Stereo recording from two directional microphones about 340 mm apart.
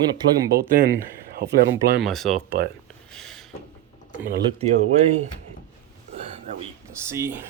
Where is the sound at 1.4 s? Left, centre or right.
Right.